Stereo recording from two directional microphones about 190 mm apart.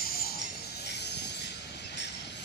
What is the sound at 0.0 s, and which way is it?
Train, 55° left (ahead or behind).